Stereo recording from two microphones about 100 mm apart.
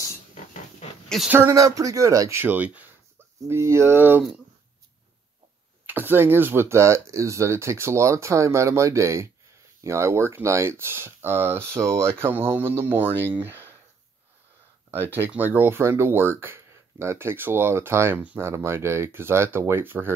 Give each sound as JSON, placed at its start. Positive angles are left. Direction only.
{"t": 0.3, "sound": "a sound", "side_deg": 90}
{"t": 1.0, "sound": "a sound", "side_deg": 0}
{"t": 1.3, "sound": "speech", "side_deg": -30}
{"t": 2.4, "sound": "speech", "side_deg": -15}
{"t": 3.4, "sound": "speech", "side_deg": -25}
{"t": 5.9, "sound": "speech", "side_deg": -20}
{"t": 15.0, "sound": "speech", "side_deg": -20}